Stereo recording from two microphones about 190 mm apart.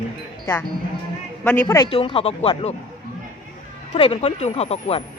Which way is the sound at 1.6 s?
20° left (ahead or behind).